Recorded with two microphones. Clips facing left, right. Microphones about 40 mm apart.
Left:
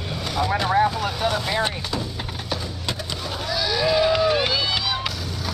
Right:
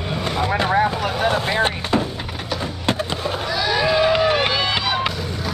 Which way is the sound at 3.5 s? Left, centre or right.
Right.